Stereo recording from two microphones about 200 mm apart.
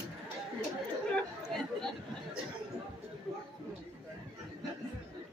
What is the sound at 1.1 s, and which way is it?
Chatter, 5° left (ahead or behind).